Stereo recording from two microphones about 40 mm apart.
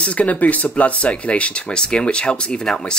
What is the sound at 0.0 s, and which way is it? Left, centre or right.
Speech, left.